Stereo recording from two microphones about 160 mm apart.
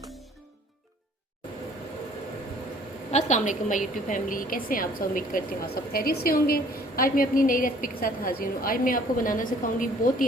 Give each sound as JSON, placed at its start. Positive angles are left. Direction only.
{"t": 3.1, "sound": "a woman's voice", "side_deg": 45}